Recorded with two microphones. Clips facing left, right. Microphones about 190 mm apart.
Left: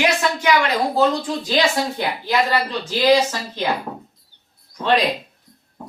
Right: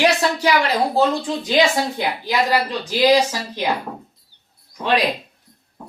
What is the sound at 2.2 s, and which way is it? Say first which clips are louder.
A woman's voice: even; 15° right (ahead or behind).